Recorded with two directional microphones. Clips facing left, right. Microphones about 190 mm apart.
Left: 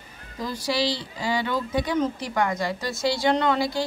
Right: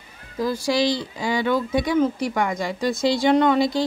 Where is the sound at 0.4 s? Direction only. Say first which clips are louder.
Right 5 dB; 10° right (ahead or behind).